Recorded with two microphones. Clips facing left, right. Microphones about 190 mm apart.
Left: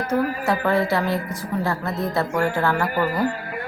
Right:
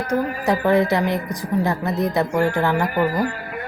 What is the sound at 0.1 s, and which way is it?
Speech, 15° right (ahead or behind).